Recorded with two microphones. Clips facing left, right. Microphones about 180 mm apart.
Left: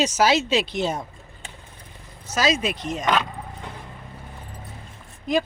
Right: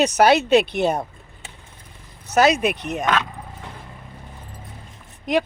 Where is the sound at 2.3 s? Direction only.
60° right (ahead or behind).